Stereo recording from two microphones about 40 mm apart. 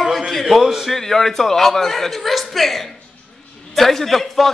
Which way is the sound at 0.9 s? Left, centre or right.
Centre.